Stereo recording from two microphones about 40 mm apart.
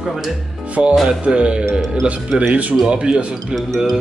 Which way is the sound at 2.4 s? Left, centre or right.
Right.